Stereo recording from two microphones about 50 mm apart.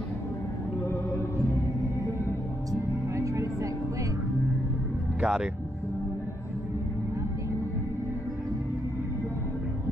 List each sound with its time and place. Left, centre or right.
2.7 s music: right
5.2 s speech: centre